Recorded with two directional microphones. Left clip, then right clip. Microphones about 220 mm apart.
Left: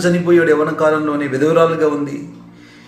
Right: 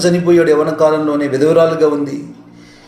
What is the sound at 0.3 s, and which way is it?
A man's voice, 5° right (ahead or behind).